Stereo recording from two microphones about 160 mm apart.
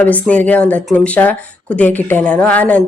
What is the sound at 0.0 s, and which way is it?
Speech, 10° left (ahead or behind).